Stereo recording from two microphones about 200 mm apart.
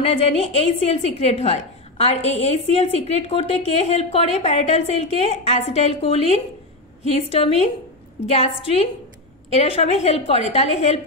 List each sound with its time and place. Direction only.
0.0 s a woman's voice: 30° left (ahead or behind)